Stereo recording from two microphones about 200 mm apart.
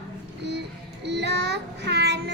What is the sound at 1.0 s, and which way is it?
Child singing, 60° right (ahead or behind).